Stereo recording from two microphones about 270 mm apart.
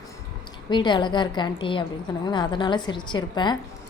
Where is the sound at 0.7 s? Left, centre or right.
Centre.